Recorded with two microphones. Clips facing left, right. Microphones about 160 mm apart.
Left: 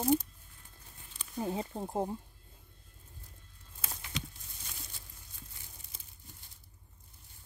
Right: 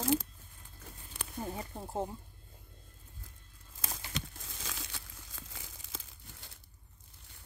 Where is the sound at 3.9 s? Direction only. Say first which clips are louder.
Even; 90° right.